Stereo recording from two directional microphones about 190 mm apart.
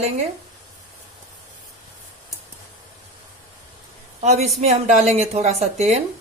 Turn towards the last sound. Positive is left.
turn(degrees=-35)  # may be behind; listen again after turning